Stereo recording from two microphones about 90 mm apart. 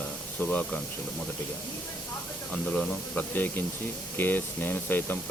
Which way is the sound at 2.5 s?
15° left (ahead or behind).